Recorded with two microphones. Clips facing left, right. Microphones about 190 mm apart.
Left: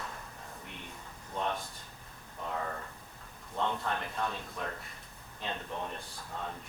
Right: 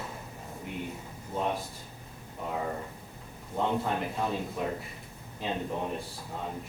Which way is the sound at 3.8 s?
10° right (ahead or behind).